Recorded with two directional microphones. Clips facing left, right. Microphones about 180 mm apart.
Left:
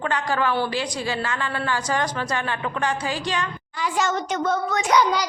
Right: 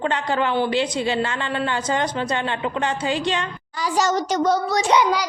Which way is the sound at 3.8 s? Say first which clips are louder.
Right 3 dB; 40° right (ahead or behind).